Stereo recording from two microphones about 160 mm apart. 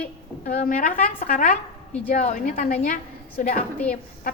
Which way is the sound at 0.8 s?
60° left (ahead or behind).